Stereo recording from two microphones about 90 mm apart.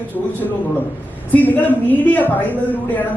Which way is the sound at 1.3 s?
20° left (ahead or behind).